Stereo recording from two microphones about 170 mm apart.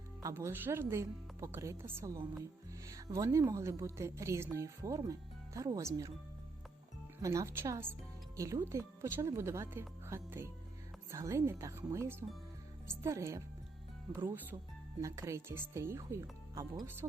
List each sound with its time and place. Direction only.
0.2 s a woman's voice: 20° right (ahead or behind)
7.2 s a woman's voice: 20° right (ahead or behind)